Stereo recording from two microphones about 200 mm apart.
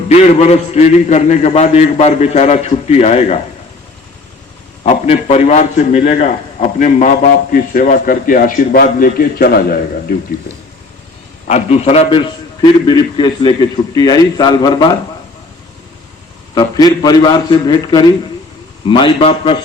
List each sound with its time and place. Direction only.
0.1 s a man's voice: 35° left (ahead or behind)
4.8 s a man's voice: 35° left (ahead or behind); by 10.2 s 50° left (ahead or behind)
11.4 s a man's voice: 35° left (ahead or behind)
16.6 s a man's voice: 20° left (ahead or behind)